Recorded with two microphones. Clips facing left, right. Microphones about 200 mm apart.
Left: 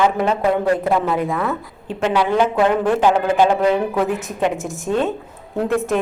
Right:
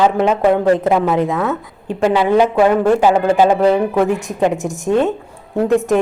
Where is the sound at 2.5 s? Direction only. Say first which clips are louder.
Right 4 dB; 10° right (ahead or behind).